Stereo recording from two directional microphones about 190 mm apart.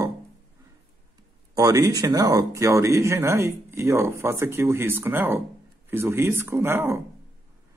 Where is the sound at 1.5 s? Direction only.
20° right (ahead or behind).